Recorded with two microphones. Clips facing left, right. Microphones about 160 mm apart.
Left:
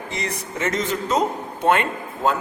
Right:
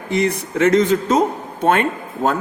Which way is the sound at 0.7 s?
60° right (ahead or behind).